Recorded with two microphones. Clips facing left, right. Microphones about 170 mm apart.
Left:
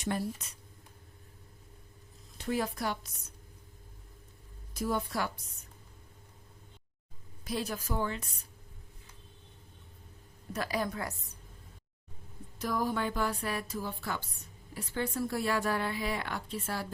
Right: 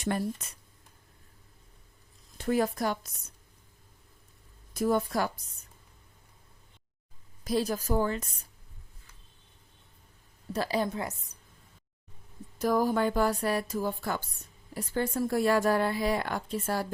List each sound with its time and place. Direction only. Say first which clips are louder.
2.5 s a woman's voice: right 5 dB; 45° right (ahead or behind)
4.7 s speech: right 6 dB; 50° right (ahead or behind)
7.4 s a woman's voice: right 7 dB; 40° right (ahead or behind)
10.5 s a woman's voice: right 4 dB; 30° right (ahead or behind)
12.5 s a woman's voice: right 6 dB; 45° right (ahead or behind)